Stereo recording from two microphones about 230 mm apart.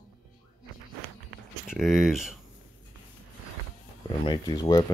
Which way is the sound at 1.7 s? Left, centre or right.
Centre.